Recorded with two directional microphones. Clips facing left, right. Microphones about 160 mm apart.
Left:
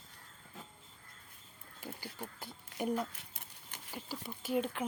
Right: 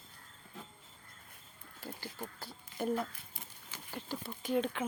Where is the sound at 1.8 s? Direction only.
10° left (ahead or behind).